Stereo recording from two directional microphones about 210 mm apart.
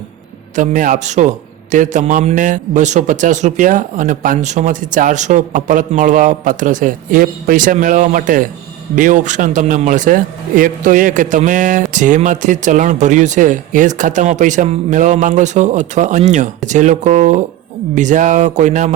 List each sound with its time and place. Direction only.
0.5 s a man's voice: 40° right (ahead or behind)